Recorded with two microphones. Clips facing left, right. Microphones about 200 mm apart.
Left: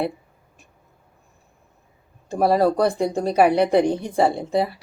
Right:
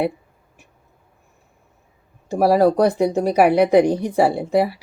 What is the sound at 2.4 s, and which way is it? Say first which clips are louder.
A woman's voice: right 3 dB; 10° right (ahead or behind).